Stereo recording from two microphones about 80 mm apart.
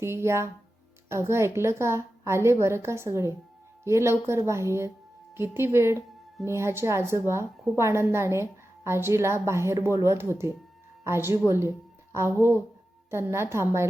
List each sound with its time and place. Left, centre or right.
0.0 s a woman's voice: right